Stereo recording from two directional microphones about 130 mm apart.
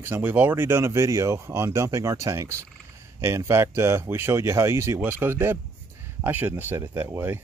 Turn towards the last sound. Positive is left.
turn(degrees=-15)  # may be behind; listen again after turning